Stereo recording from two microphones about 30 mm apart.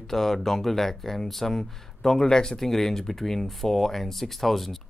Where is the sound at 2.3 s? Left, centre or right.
Left.